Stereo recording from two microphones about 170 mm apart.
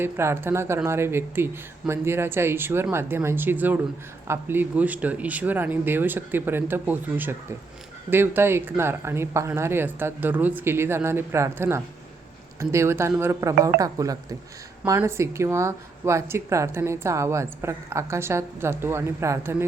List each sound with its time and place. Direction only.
0.0 s speech: 15° right (ahead or behind)